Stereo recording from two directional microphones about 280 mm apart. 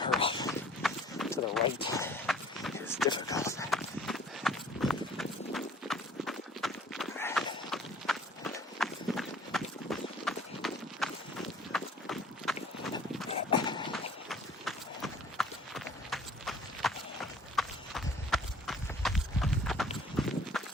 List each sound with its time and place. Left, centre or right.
0.2 s walk: centre
0.8 s run: centre
1.8 s run: centre
3.1 s a sound: centre
3.7 s clip-clop: centre
13.5 s a sound: centre
13.9 s clip-clop: centre